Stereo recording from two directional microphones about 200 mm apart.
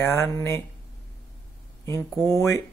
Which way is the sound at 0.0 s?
15° left (ahead or behind).